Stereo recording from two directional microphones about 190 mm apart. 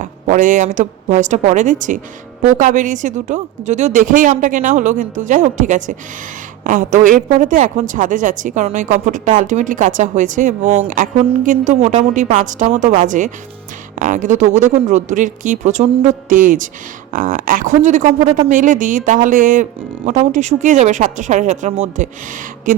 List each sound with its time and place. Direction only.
0.0 s a woman's voice: 45° right (ahead or behind)